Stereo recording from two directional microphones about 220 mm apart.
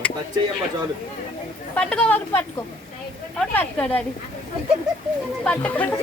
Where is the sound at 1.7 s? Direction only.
5° left (ahead or behind).